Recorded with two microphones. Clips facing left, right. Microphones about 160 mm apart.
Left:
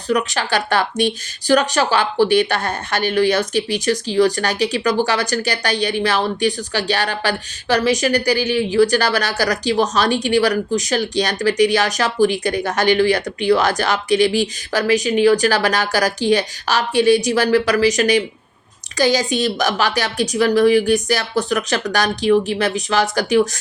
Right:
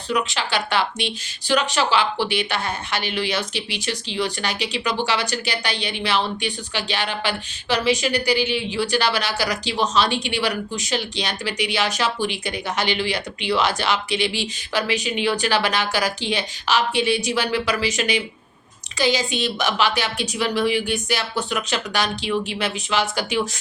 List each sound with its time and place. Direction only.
0.1 s a woman's voice: 45° left (ahead or behind)